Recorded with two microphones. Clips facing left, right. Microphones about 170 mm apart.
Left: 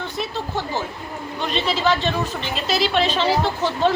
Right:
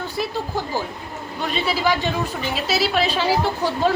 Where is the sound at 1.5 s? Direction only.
10° right (ahead or behind).